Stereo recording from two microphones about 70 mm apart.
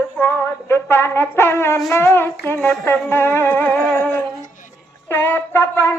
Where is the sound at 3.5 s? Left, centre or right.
Left.